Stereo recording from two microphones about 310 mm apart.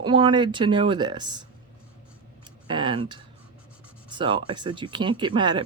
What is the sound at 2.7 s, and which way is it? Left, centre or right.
Speech, centre.